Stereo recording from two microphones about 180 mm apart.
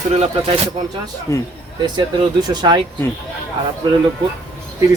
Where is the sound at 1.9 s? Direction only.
25° right (ahead or behind).